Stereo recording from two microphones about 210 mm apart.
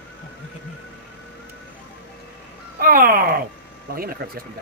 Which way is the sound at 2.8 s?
40° right (ahead or behind).